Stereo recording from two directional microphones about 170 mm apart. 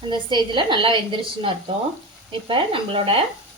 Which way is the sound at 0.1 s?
25° right (ahead or behind).